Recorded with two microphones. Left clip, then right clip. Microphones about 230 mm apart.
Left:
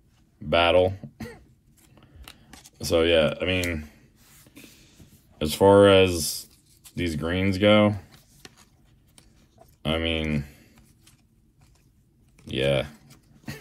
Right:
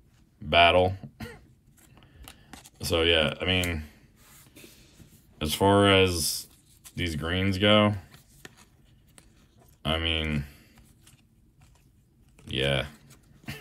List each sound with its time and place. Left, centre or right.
0.5 s a sound: centre
2.0 s scissors: centre
2.8 s speech: centre
5.4 s speech: centre
9.8 s speech: centre
12.4 s speech: centre